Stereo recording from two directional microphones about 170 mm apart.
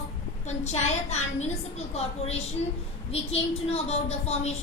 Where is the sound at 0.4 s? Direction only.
40° left (ahead or behind).